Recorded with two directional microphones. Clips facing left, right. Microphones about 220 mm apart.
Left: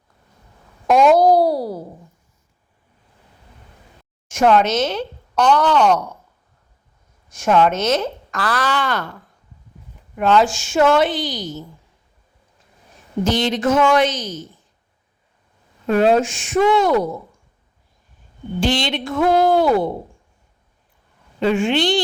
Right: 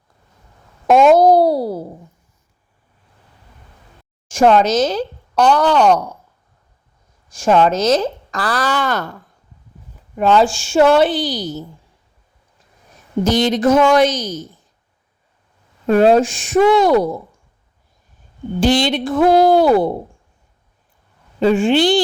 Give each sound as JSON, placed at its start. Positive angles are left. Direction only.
{"t": 0.9, "sound": "a child's voice", "side_deg": -25}
{"t": 1.2, "sound": "a sound", "side_deg": 0}
{"t": 1.5, "sound": "a child's voice", "side_deg": -25}
{"t": 4.3, "sound": "a woman's voice", "side_deg": -30}
{"t": 7.3, "sound": "speech", "side_deg": -30}
{"t": 10.2, "sound": "speech", "side_deg": -30}
{"t": 13.2, "sound": "speech", "side_deg": -40}
{"t": 15.9, "sound": "speech", "side_deg": -40}
{"t": 18.6, "sound": "speech", "side_deg": -35}
{"t": 21.4, "sound": "speech", "side_deg": -35}